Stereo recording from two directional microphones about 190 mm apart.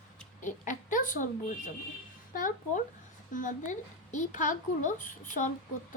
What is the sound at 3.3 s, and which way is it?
A woman's voice, 40° left (ahead or behind).